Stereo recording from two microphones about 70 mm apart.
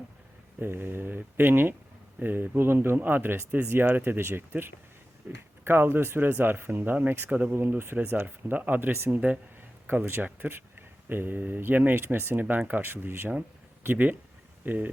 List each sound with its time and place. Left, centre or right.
0.6 s speech: right